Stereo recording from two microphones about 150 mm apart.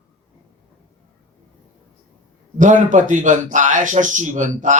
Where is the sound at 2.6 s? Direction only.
55° right (ahead or behind).